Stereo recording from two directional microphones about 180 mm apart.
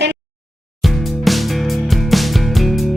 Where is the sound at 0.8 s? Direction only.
Centre (ahead or behind).